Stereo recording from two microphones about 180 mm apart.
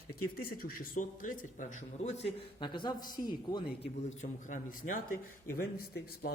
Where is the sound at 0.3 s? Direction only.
55° left (ahead or behind).